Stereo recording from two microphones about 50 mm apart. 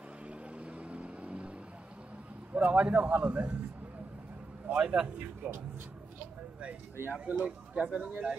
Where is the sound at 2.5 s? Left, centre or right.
Right.